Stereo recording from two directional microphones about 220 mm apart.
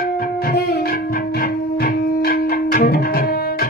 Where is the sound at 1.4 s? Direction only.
40° left (ahead or behind).